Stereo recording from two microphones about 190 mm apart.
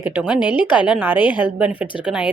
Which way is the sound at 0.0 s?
10° right (ahead or behind).